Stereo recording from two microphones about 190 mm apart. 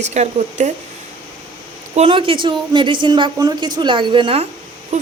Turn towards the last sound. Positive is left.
turn(degrees=-25)  # may be behind; listen again after turning